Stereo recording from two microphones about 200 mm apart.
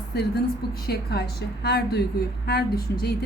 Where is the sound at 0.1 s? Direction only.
55° left (ahead or behind).